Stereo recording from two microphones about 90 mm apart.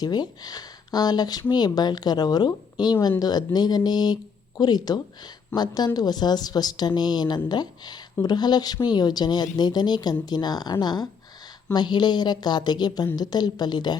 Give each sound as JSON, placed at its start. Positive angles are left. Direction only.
{"t": 0.0, "sound": "a woman's voice", "side_deg": 50}